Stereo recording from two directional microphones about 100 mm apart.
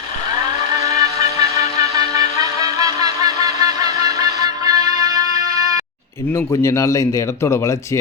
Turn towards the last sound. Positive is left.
turn(degrees=30)  # may be behind; listen again after turning